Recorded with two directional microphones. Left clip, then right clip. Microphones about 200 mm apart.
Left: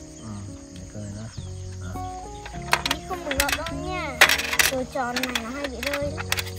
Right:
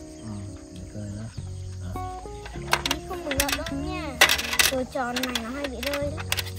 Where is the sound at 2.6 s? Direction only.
5° left (ahead or behind).